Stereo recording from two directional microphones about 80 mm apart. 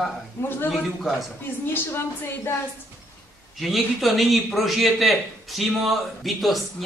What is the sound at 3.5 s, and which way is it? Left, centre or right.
A man's voice, centre.